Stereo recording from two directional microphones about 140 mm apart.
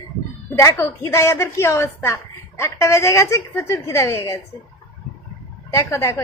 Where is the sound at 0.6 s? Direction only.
20° left (ahead or behind).